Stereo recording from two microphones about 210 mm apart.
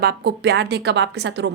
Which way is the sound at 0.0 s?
50° right (ahead or behind).